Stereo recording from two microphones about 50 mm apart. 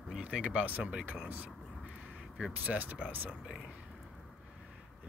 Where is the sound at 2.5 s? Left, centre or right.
Right.